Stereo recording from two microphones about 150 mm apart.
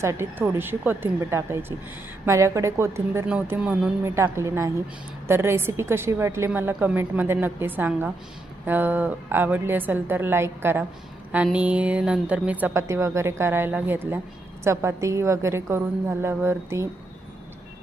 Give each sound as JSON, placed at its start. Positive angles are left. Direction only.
{"t": 0.0, "sound": "a woman's voice", "side_deg": -15}
{"t": 4.0, "sound": "a woman's voice", "side_deg": -20}